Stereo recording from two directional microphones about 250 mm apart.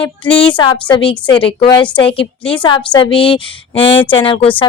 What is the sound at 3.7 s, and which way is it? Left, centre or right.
Speech, centre.